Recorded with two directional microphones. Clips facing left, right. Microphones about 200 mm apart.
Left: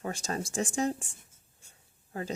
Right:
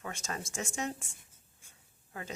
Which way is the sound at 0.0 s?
35° left (ahead or behind).